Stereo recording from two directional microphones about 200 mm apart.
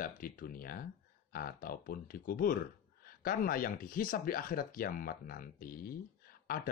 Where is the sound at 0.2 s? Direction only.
45° left (ahead or behind).